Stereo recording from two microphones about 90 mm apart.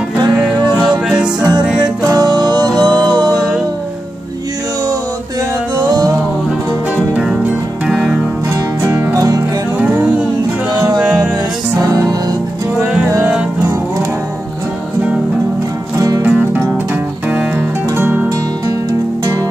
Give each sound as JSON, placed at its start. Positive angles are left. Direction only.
{"t": 0.8, "sound": "music", "side_deg": -10}
{"t": 2.0, "sound": "music", "side_deg": -50}
{"t": 5.8, "sound": "music", "side_deg": -45}
{"t": 7.9, "sound": "music", "side_deg": -15}
{"t": 8.8, "sound": "music", "side_deg": -30}
{"t": 9.8, "sound": "music", "side_deg": -15}
{"t": 16.3, "sound": "music", "side_deg": -20}
{"t": 17.9, "sound": "music", "side_deg": -25}